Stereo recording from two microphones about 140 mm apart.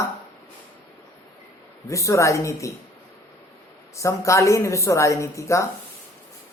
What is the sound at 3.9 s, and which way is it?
Speech, 20° left (ahead or behind).